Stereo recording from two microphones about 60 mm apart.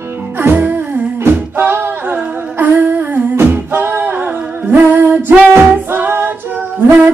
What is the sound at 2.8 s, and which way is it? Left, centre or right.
Humming, right.